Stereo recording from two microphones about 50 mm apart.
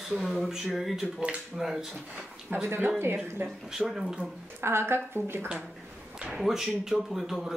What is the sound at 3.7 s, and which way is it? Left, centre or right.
Speech, centre.